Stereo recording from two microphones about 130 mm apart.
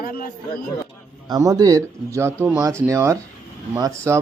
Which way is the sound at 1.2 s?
25° right (ahead or behind).